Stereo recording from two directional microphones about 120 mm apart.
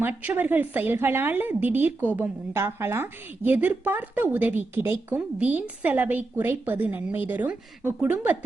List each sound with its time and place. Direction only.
0.0 s a woman's voice: 15° right (ahead or behind)